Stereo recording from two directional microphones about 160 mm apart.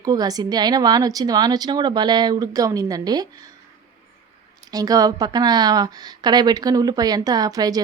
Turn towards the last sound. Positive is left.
turn(degrees=-25)  # may be behind; listen again after turning